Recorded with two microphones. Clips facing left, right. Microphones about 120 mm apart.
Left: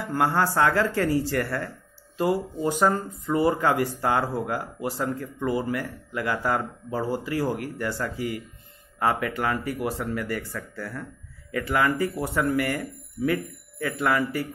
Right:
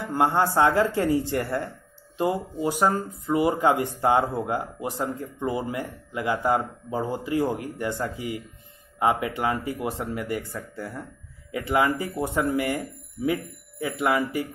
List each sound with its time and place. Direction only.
0.0 s speech: 20° right (ahead or behind)